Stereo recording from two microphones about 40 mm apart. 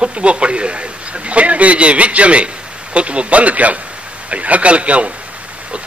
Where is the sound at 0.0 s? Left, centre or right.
Right.